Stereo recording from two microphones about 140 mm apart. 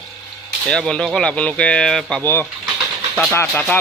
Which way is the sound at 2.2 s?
15° left (ahead or behind).